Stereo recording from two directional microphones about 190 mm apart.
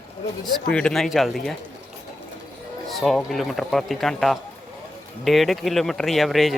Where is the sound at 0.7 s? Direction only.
5° left (ahead or behind).